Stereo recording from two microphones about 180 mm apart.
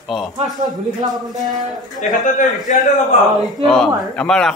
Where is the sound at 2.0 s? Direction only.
50° left (ahead or behind).